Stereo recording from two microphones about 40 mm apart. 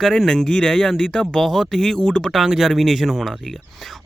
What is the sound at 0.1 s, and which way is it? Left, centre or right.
A man's voice, centre.